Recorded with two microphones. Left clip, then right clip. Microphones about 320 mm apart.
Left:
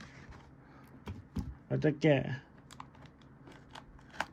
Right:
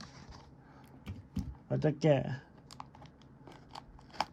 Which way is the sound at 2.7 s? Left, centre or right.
Right.